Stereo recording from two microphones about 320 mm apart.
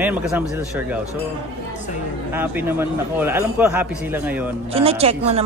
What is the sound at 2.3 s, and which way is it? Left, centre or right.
A man's voice, centre.